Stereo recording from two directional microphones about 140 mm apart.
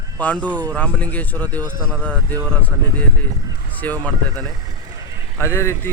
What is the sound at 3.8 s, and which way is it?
Mantra, 10° left (ahead or behind).